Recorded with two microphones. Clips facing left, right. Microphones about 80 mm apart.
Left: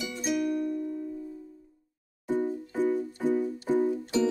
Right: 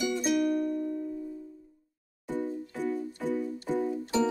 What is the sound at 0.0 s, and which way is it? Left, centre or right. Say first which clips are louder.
Music: right 3 dB; centre.